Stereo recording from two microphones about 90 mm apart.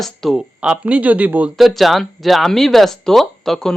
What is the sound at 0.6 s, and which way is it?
Speech, 15° right (ahead or behind).